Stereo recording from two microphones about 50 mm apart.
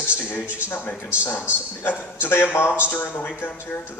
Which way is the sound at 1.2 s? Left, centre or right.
Left.